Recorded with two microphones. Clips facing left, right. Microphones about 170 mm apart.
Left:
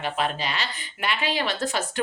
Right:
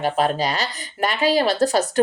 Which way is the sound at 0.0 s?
40° right (ahead or behind).